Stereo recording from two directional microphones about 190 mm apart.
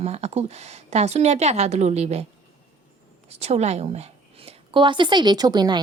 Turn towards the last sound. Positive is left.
turn(degrees=-20)  # may be behind; listen again after turning